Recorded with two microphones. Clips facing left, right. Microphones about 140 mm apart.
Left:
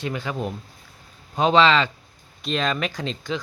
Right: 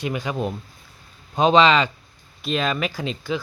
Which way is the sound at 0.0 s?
15° right (ahead or behind).